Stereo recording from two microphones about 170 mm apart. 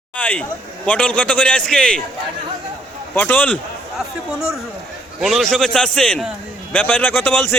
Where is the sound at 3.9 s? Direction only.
5° right (ahead or behind).